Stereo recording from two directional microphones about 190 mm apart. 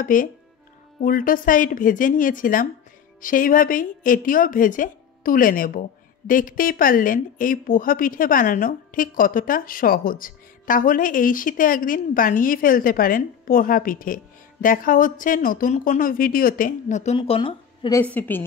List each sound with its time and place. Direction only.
0.0 s a woman's voice: 45° left (ahead or behind); by 18.0 s 25° left (ahead or behind)
18.0 s a woman's voice: 10° left (ahead or behind)